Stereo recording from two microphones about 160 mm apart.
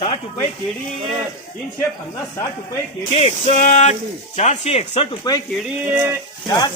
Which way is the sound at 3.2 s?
40° left (ahead or behind).